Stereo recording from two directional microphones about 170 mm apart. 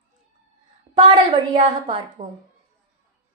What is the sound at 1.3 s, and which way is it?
Speech, 35° right (ahead or behind).